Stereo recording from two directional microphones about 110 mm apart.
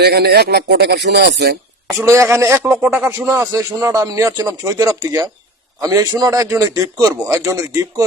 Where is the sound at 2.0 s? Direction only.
25° right (ahead or behind).